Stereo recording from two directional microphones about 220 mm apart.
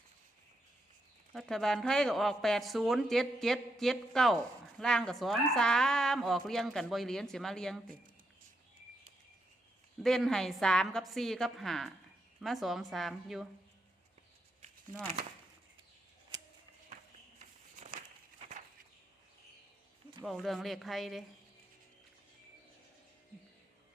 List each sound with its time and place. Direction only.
1.3 s speech: centre (ahead or behind)
10.0 s speech: centre (ahead or behind)
17.4 s a sound: 30° right (ahead or behind)
20.2 s speech: centre (ahead or behind)